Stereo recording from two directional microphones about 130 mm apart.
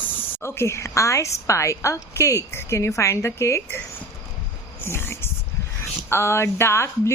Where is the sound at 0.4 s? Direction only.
20° left (ahead or behind).